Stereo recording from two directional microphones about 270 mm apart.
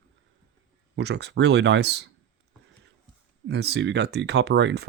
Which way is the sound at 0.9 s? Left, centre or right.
Right.